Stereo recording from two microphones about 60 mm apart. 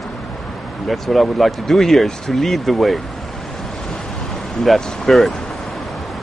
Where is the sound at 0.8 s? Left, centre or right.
Centre.